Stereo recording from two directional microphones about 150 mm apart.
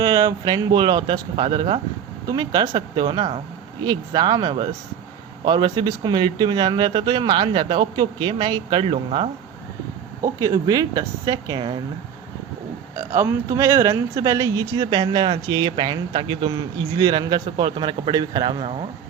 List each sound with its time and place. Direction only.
0.0 s speech: 25° right (ahead or behind)
10.4 s speech: 25° right (ahead or behind)
13.0 s speech: 20° right (ahead or behind)